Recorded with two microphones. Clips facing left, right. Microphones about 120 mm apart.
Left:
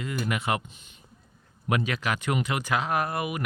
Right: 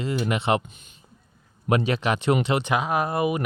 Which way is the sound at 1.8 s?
25° right (ahead or behind).